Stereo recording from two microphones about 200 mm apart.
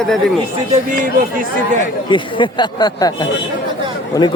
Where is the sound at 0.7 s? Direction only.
40° right (ahead or behind).